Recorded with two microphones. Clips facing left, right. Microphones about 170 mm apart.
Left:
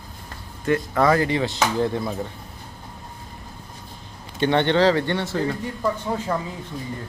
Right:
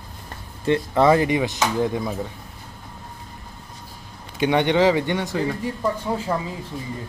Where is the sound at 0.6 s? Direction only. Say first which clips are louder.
Right 2 dB; 25° right (ahead or behind).